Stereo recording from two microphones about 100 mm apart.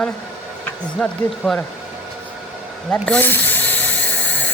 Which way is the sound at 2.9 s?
10° left (ahead or behind).